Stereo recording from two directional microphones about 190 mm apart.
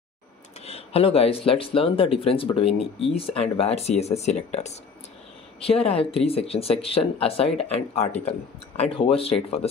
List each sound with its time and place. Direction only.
0.6 s speech: 30° left (ahead or behind)